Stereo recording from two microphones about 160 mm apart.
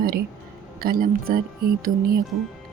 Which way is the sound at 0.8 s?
65° right (ahead or behind).